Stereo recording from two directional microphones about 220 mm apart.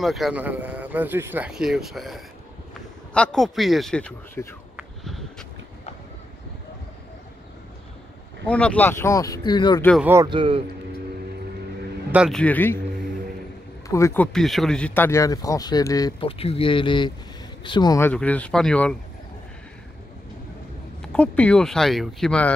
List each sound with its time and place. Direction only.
0.0 s speech: centre (ahead or behind)
4.7 s a sound: centre (ahead or behind)
8.5 s speech: 5° left (ahead or behind)
10.0 s a man's voice: 15° right (ahead or behind)
12.1 s speech: centre (ahead or behind)
13.8 s speech: 15° left (ahead or behind)
21.1 s speech: 5° left (ahead or behind)